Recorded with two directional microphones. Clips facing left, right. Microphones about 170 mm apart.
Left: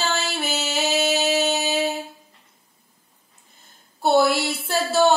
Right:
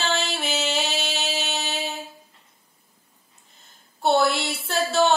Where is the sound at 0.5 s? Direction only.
5° left (ahead or behind).